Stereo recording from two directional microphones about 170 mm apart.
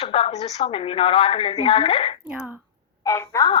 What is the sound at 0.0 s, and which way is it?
A woman's voice, 35° left (ahead or behind).